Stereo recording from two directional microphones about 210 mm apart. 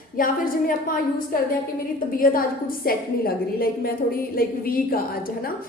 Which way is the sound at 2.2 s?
45° left (ahead or behind).